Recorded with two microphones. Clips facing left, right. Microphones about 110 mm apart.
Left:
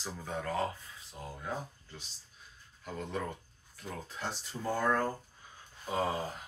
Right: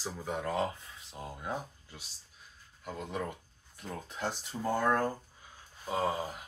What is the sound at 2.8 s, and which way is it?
Speech, 5° right (ahead or behind).